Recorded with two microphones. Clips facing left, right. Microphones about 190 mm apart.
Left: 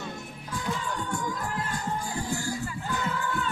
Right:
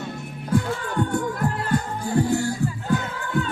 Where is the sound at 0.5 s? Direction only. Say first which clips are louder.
Right 9 dB; 60° right (ahead or behind).